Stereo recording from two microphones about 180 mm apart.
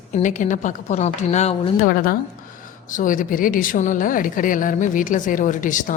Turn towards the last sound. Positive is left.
turn(degrees=45)  # may be behind; listen again after turning